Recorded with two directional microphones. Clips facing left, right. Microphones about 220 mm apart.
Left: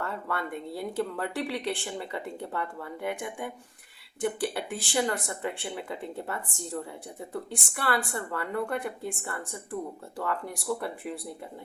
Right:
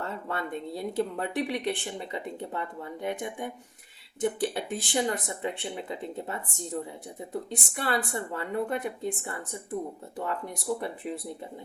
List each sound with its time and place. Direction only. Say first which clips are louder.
0.0 s speech: even; 20° right (ahead or behind)